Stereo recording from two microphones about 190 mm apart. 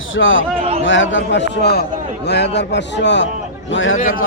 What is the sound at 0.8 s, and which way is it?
Speech, 80° left.